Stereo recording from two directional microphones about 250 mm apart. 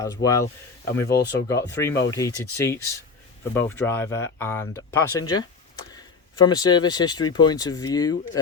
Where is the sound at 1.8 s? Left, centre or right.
Centre.